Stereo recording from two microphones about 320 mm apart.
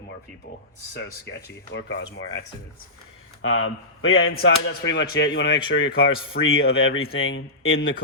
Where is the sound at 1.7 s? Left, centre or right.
Left.